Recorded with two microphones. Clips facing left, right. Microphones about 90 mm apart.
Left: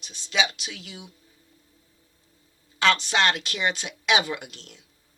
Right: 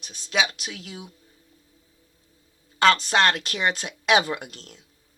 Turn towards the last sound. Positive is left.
turn(degrees=-45)  # may be behind; listen again after turning